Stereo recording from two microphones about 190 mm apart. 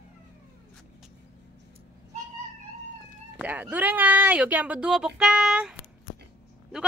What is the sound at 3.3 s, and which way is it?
Speech, 5° right (ahead or behind).